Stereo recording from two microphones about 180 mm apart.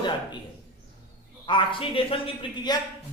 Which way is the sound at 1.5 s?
25° left (ahead or behind).